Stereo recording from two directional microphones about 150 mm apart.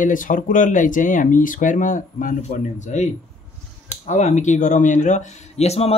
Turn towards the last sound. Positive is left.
turn(degrees=45)  # may be behind; listen again after turning